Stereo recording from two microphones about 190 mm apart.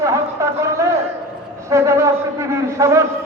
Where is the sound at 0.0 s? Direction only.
15° right (ahead or behind).